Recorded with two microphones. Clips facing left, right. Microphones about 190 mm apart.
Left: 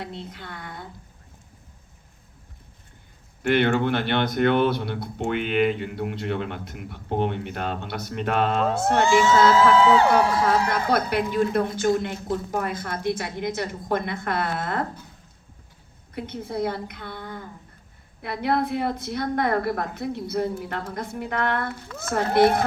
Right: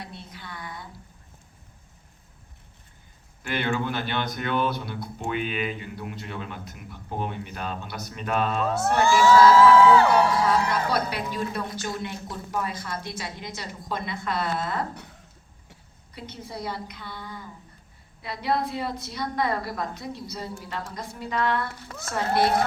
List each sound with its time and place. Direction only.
0.3 s a woman's voice: 55° left (ahead or behind)
3.4 s a woman's voice: 60° left (ahead or behind)
9.0 s music: 20° left (ahead or behind)
10.1 s a woman's voice: 50° left (ahead or behind)
16.1 s a woman's voice: 55° left (ahead or behind)